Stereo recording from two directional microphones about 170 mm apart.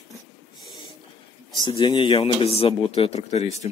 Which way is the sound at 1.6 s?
25° left (ahead or behind).